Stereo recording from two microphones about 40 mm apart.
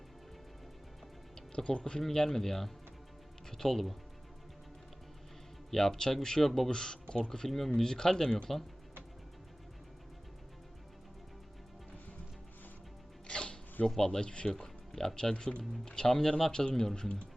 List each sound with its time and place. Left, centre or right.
1.4 s speech: left
2.0 s speech: centre
5.7 s speech: centre
13.2 s music: left
13.8 s speech: centre